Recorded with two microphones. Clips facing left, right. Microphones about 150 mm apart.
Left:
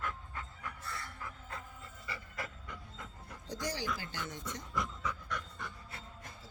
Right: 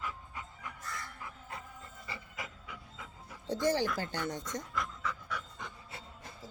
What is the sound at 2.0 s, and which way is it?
Pant, 15° right (ahead or behind).